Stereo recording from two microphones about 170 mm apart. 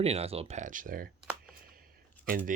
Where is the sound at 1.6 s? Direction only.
60° right (ahead or behind).